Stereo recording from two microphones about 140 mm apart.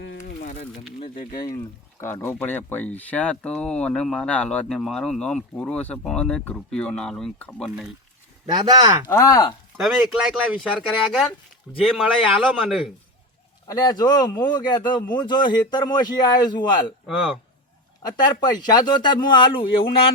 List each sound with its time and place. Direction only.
0.2 s a sound: 70° left (ahead or behind)
1.0 s speech: 40° left (ahead or behind); by 7.7 s 5° left (ahead or behind)
8.4 s speech: 30° right (ahead or behind)
9.0 s speech: 25° left (ahead or behind)
10.7 s a man's voice: 5° right (ahead or behind)
13.7 s speech: 30° left (ahead or behind)
17.1 s a man's voice: 5° right (ahead or behind)
18.0 s speech: 30° left (ahead or behind)